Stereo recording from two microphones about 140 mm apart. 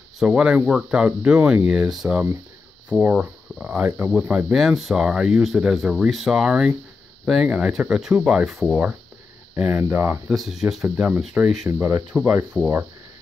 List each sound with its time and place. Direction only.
0.2 s speech: 5° right (ahead or behind)
9.6 s speech: 10° right (ahead or behind)
10.3 s speech: centre (ahead or behind)